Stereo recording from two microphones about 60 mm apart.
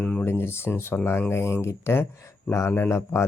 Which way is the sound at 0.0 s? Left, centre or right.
Centre.